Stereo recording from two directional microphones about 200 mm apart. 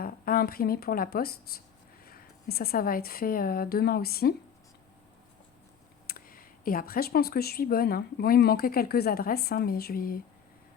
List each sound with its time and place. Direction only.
0.0 s speech: 45° left (ahead or behind)
6.1 s speech: 45° left (ahead or behind)